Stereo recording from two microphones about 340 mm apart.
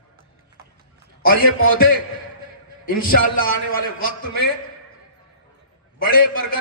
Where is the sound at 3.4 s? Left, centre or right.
Left.